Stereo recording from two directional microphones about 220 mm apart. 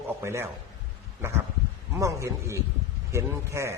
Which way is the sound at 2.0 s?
15° right (ahead or behind).